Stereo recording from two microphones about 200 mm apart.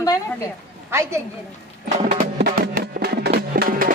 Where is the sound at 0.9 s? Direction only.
15° right (ahead or behind).